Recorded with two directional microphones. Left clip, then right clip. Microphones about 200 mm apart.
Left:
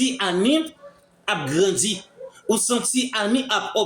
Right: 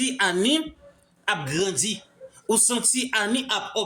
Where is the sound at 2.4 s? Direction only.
40° right (ahead or behind).